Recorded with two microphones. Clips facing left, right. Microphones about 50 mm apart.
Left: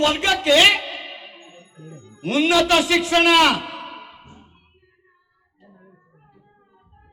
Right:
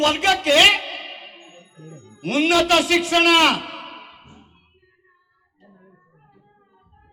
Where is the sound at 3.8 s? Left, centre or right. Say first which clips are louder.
Left 2 dB; right.